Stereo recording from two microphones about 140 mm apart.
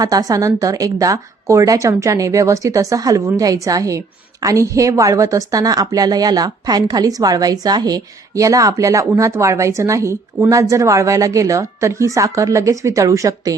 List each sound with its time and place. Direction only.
0.0 s a woman's voice: 25° right (ahead or behind)